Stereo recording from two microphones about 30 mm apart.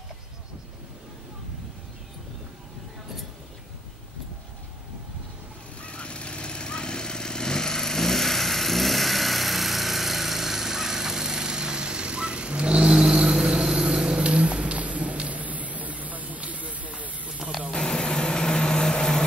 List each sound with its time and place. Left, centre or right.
5.8 s vehicle: left; by 12.8 s right
12.8 s vehicle: centre
14.2 s a sound: right
17.7 s vehicle: left